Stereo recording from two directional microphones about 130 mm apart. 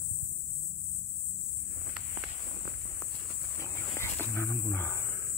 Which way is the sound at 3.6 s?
20° left (ahead or behind).